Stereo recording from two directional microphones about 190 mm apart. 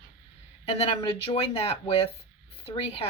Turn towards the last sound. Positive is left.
turn(degrees=30)  # may be behind; listen again after turning